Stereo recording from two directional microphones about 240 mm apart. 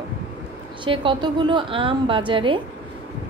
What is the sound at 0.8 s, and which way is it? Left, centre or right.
A woman's voice, centre.